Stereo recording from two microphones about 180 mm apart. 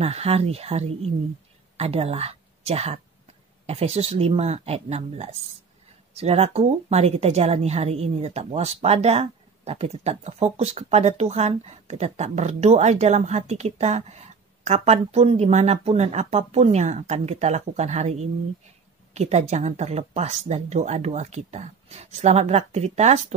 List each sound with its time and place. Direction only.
0.0 s a woman's voice: 35° right (ahead or behind)